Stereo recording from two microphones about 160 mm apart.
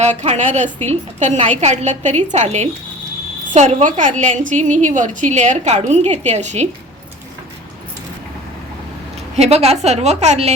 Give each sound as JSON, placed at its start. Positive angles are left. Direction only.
{"t": 0.0, "sound": "a woman's voice", "side_deg": -45}
{"t": 9.3, "sound": "a woman's voice", "side_deg": -40}